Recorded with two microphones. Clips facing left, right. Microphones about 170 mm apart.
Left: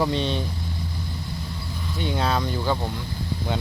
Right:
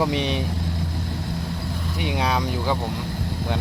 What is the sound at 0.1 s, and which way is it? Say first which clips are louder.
Speech: right 1 dB; 90° right.